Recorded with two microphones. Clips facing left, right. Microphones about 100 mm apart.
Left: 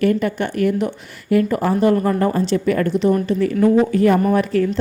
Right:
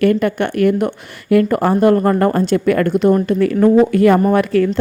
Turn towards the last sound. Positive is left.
turn(degrees=-70)  # may be behind; listen again after turning